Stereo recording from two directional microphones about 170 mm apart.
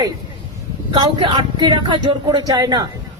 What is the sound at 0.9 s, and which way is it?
Speech, 25° right (ahead or behind).